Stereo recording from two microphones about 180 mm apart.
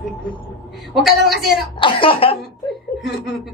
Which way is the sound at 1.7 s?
30° left (ahead or behind).